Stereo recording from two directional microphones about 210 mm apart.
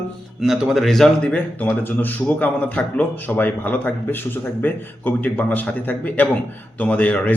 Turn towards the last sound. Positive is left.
turn(degrees=5)  # may be behind; listen again after turning